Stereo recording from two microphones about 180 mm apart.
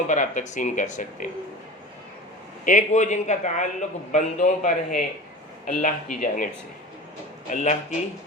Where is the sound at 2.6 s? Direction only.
45° left (ahead or behind).